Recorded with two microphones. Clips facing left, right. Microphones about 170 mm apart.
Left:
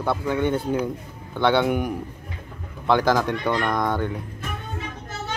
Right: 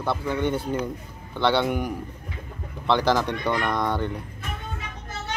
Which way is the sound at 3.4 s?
5° left (ahead or behind).